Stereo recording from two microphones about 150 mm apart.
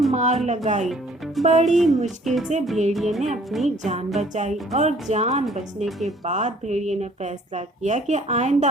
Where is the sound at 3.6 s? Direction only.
50° right (ahead or behind).